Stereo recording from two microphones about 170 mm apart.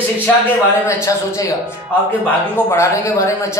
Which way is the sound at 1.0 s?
20° left (ahead or behind).